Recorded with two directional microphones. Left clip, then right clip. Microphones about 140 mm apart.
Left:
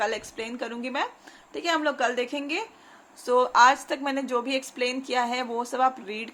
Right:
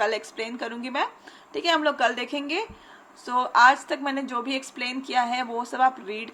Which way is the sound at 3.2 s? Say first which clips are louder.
Even; 30° left (ahead or behind).